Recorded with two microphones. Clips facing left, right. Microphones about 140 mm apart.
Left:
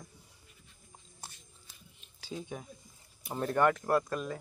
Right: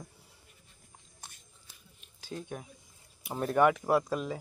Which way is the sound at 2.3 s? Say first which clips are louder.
Even; 5° left (ahead or behind).